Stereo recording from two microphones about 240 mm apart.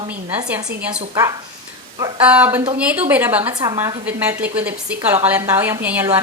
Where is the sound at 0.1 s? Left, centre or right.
Centre.